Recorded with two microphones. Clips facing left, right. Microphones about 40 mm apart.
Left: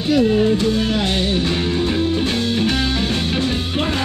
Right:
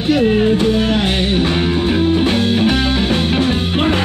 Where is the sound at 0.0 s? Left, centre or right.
Right.